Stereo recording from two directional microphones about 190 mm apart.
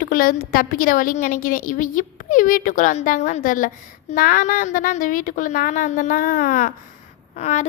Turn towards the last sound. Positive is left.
turn(degrees=40)  # may be behind; listen again after turning